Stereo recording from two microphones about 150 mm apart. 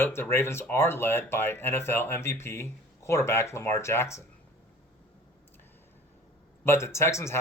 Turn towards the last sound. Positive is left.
turn(degrees=20)  # may be behind; listen again after turning